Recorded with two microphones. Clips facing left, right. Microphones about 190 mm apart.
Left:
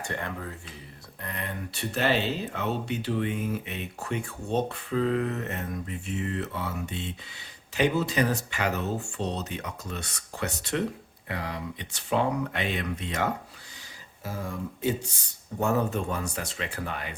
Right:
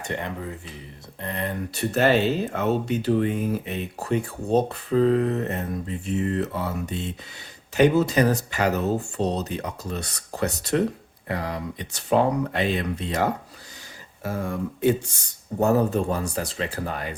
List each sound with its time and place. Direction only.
0.0 s speech: 20° right (ahead or behind)
1.2 s speech: 30° right (ahead or behind)
1.7 s speech: 45° right (ahead or behind)
14.3 s speech: 60° right (ahead or behind)
15.5 s speech: 35° right (ahead or behind)